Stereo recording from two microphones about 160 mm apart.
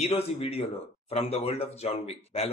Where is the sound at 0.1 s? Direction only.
40° left (ahead or behind).